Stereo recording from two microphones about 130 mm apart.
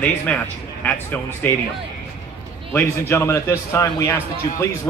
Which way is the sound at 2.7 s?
20° left (ahead or behind).